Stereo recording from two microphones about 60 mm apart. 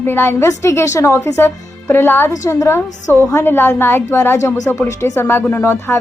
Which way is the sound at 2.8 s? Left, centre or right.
Left.